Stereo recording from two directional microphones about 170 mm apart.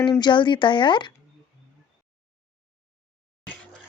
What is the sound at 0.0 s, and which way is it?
Speech, 25° left (ahead or behind).